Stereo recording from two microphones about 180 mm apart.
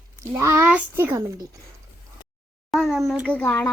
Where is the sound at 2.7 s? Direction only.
Centre (ahead or behind).